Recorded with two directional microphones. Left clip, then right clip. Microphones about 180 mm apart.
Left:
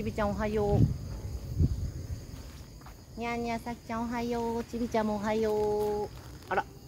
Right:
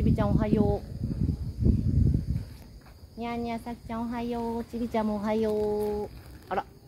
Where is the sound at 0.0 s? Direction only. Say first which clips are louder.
Right 2 dB; 30° right (ahead or behind).